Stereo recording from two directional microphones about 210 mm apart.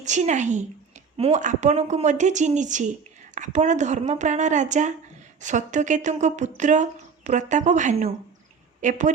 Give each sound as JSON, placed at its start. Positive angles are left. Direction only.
{"t": 0.0, "sound": "a woman's voice", "side_deg": -35}